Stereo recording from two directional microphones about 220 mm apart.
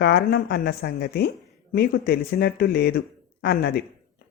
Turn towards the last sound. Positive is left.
turn(degrees=45)  # may be behind; listen again after turning